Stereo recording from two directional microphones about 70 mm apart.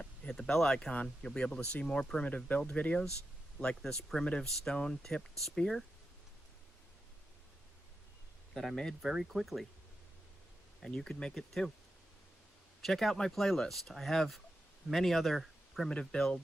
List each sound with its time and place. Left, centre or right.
0.0 s speech: centre
8.5 s speech: centre
9.0 s speech: centre
10.8 s speech: centre
12.8 s speech: centre